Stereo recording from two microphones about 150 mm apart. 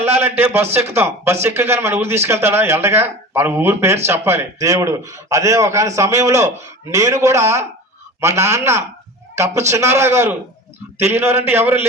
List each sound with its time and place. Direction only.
0.0 s a man's voice: 15° right (ahead or behind)